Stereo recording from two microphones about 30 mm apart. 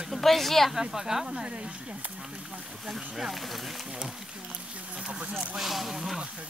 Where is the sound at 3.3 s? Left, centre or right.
Centre.